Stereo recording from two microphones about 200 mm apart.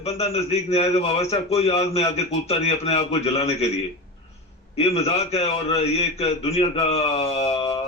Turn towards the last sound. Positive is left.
turn(degrees=30)  # may be behind; listen again after turning